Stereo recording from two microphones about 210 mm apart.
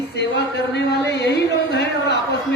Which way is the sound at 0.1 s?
55° left (ahead or behind).